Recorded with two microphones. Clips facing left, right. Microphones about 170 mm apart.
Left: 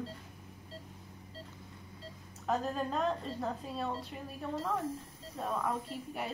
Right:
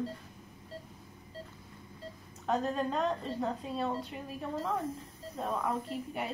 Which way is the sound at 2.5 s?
Centre (ahead or behind).